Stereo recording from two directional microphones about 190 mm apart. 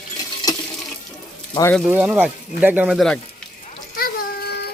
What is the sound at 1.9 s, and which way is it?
Speech, 10° right (ahead or behind).